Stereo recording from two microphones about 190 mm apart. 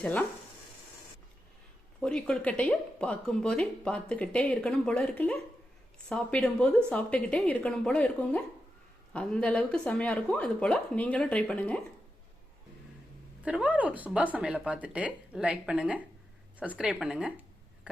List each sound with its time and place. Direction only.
0.0 s speech: 10° left (ahead or behind)
2.0 s a woman's voice: 5° left (ahead or behind)
13.4 s a woman's voice: 5° right (ahead or behind)